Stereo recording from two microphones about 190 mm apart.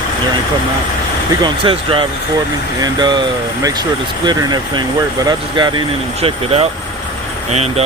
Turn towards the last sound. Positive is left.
turn(degrees=-35)  # may be behind; listen again after turning